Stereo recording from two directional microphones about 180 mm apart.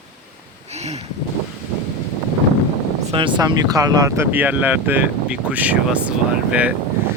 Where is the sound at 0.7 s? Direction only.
35° right (ahead or behind).